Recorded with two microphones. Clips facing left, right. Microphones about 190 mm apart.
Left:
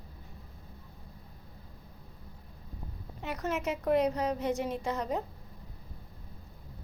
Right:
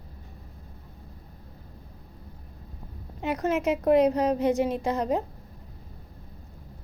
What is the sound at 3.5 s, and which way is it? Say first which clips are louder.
Speech: right 7 dB; 90° right.